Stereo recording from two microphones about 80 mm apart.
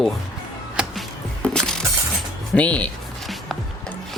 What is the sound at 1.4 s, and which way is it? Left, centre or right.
Music, centre.